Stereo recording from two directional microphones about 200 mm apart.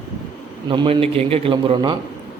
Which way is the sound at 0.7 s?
25° right (ahead or behind).